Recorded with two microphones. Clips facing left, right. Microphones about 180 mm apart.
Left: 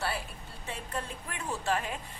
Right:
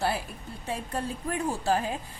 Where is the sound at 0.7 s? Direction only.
35° right (ahead or behind).